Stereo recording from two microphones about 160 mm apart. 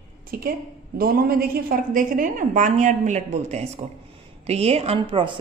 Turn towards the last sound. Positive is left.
turn(degrees=-30)  # may be behind; listen again after turning